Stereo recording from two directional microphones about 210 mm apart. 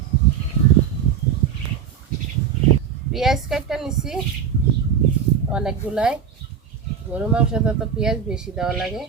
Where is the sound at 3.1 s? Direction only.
Centre (ahead or behind).